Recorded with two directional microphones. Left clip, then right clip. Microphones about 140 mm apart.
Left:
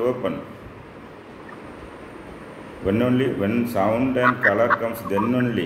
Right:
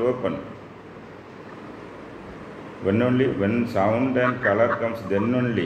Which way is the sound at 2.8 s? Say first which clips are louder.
Even; 15° left (ahead or behind).